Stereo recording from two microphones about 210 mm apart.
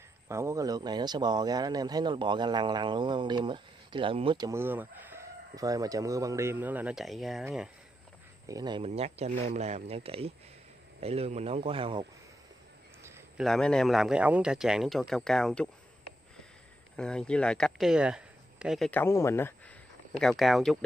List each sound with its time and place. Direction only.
0.3 s speech: 15° right (ahead or behind)
8.5 s speech: 20° right (ahead or behind)
13.4 s speech: 5° left (ahead or behind)
16.9 s speech: 5° left (ahead or behind)